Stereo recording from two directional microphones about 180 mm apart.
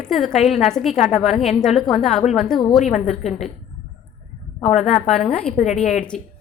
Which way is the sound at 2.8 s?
40° left (ahead or behind).